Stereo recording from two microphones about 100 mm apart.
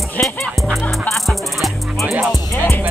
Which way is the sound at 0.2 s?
20° left (ahead or behind).